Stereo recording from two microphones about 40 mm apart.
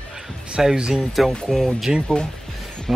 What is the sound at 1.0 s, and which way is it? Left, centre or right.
Speech, centre.